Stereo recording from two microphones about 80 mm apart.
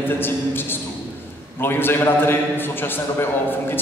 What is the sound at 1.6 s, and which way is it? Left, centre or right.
Speech, left.